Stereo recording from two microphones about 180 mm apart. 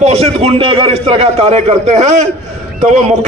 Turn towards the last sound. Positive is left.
turn(degrees=-40)  # may be behind; listen again after turning